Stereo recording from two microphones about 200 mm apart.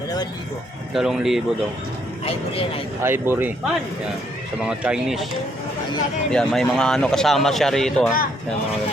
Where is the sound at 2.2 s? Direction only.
25° left (ahead or behind).